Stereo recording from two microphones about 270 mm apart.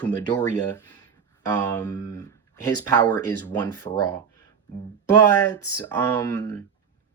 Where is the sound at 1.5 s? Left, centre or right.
Centre.